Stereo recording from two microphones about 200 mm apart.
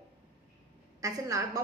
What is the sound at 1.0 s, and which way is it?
Speech, 15° right (ahead or behind).